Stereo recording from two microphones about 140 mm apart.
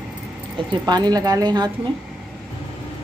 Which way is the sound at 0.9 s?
30° right (ahead or behind).